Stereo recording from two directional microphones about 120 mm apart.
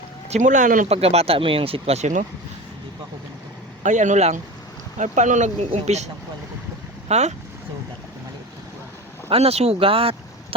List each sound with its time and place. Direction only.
0.3 s speech: 85° right
0.9 s speech: 55° right (ahead or behind); by 2.2 s 80° right
3.8 s speech: 90° right
5.7 s speech: 70° right (ahead or behind)
7.1 s speech: 70° right (ahead or behind)
9.3 s speech: 60° right (ahead or behind)